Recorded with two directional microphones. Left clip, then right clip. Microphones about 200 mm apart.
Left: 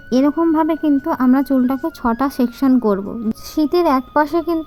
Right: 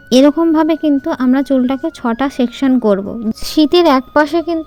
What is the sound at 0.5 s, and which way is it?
Speech, 45° right (ahead or behind).